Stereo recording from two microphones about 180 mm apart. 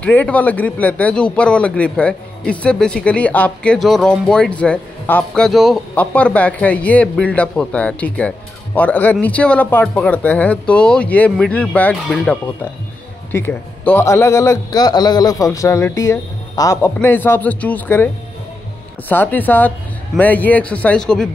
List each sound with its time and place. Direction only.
0.0 s a man's voice: 10° left (ahead or behind)
13.3 s a man's voice: 10° left (ahead or behind)